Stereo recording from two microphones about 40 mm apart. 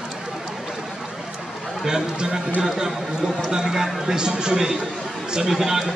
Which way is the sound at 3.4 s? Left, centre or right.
Centre.